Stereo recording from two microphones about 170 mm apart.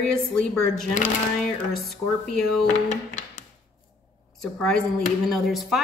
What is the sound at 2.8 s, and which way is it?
Music, 45° left (ahead or behind).